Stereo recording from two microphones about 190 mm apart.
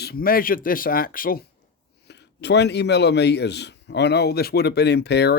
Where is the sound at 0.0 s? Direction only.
55° left (ahead or behind).